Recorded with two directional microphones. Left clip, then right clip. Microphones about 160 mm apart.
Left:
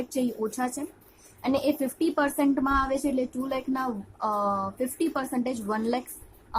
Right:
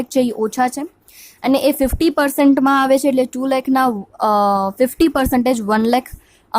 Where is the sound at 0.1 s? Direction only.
55° right (ahead or behind).